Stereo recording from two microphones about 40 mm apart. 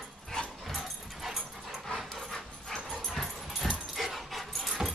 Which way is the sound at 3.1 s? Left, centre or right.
Centre.